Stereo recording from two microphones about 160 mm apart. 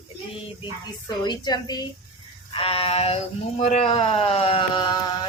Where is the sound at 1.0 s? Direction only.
25° left (ahead or behind).